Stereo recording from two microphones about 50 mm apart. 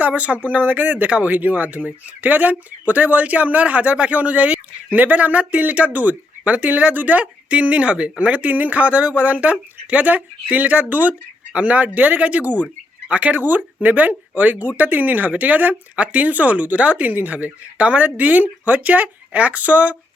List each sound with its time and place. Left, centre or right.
0.0 s speech: right